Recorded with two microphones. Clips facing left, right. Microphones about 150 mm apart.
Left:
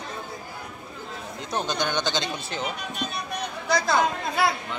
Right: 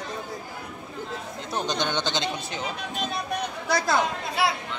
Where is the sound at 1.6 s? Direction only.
20° right (ahead or behind).